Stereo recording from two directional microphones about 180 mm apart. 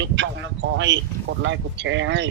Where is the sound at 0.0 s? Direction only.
85° right.